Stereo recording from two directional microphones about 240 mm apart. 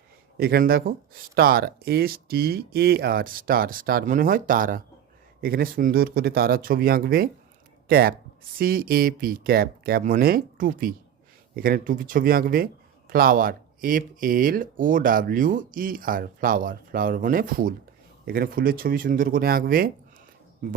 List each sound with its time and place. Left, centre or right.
0.3 s speech: right